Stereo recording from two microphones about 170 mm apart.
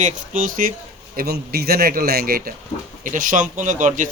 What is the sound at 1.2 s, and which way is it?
Speech, 65° right (ahead or behind).